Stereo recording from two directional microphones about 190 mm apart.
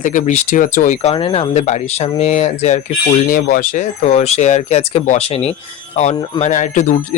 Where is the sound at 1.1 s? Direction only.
30° left (ahead or behind).